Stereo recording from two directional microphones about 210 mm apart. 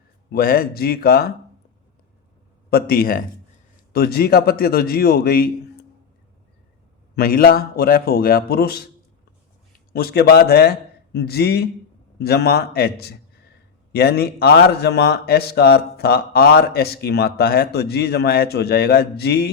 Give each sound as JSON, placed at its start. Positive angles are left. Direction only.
{"t": 0.3, "sound": "a man's voice", "side_deg": 45}
{"t": 2.6, "sound": "a man's voice", "side_deg": 45}
{"t": 7.2, "sound": "a man's voice", "side_deg": 45}
{"t": 9.9, "sound": "a man's voice", "side_deg": 45}